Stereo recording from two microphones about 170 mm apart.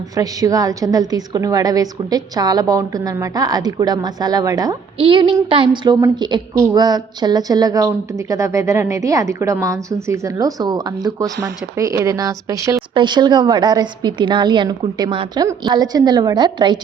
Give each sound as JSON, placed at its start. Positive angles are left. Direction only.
{"t": 0.2, "sound": "a woman's voice", "side_deg": -20}